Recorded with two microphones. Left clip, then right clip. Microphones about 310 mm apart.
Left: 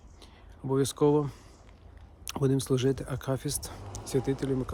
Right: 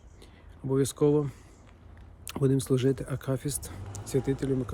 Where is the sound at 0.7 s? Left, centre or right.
Centre.